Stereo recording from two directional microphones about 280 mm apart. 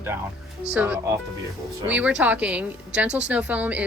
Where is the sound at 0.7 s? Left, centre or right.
Centre.